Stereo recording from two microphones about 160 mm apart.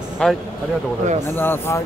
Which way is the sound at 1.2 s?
15° left (ahead or behind).